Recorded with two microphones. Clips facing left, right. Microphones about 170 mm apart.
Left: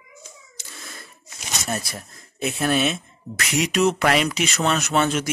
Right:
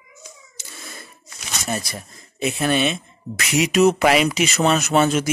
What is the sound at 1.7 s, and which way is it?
Speech, centre (ahead or behind).